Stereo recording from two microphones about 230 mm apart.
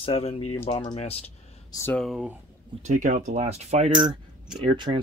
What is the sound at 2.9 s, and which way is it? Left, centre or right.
Speech, right.